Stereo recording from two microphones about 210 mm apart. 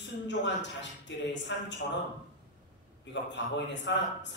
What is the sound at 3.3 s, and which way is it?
A woman's voice, 60° left (ahead or behind).